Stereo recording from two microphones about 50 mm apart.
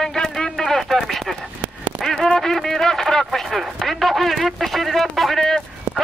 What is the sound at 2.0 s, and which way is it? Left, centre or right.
Run, centre.